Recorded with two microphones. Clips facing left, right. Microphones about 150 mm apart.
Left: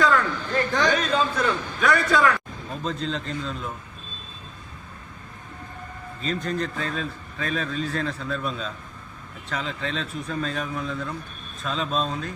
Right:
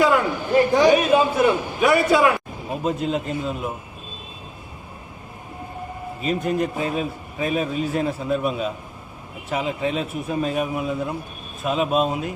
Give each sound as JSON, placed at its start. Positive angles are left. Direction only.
{"t": 0.0, "sound": "a sound", "side_deg": -20}
{"t": 2.8, "sound": "a man's voice", "side_deg": -15}
{"t": 6.2, "sound": "a man's voice", "side_deg": -10}